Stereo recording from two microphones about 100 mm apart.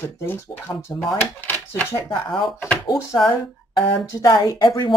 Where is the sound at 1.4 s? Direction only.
20° left (ahead or behind).